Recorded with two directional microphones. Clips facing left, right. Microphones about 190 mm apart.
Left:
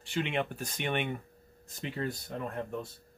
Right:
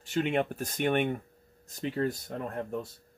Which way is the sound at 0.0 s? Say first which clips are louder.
Right 4 dB; 45° right (ahead or behind).